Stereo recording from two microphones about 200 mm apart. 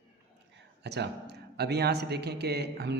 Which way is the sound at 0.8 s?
55° right (ahead or behind).